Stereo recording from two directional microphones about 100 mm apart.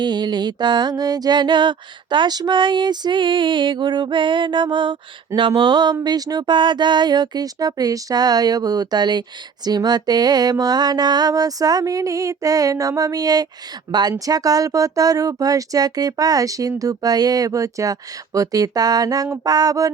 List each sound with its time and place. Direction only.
0.0 s mantra: 45° right (ahead or behind)
9.6 s speech: 40° right (ahead or behind)